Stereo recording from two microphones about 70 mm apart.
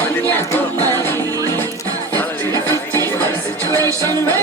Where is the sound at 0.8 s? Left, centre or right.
Right.